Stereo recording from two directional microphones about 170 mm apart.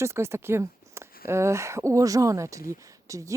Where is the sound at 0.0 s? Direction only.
15° right (ahead or behind).